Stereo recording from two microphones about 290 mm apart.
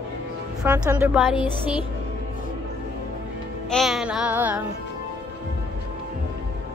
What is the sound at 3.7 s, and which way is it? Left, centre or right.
Music, centre.